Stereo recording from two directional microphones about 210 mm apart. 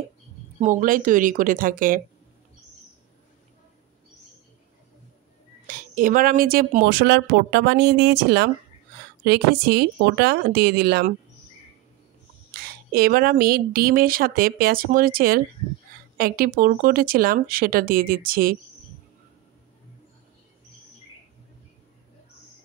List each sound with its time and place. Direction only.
0.6 s speech: 40° right (ahead or behind)
5.7 s speech: 40° right (ahead or behind)
12.5 s speech: 45° right (ahead or behind)